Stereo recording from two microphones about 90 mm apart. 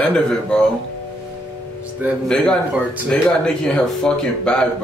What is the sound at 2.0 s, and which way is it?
Speech, 20° right (ahead or behind).